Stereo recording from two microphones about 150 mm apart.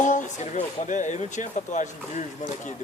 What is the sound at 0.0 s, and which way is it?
Speech, 55° left (ahead or behind).